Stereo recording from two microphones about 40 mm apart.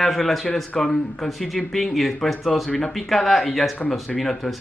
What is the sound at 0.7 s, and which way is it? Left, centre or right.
Speech, centre.